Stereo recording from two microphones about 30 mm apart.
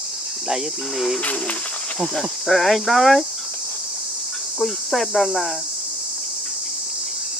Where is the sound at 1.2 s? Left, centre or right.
Left.